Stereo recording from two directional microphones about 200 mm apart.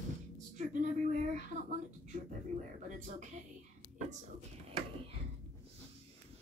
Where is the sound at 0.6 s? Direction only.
35° right (ahead or behind).